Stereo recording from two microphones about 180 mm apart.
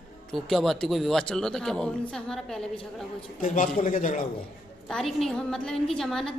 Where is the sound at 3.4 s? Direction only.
45° left (ahead or behind).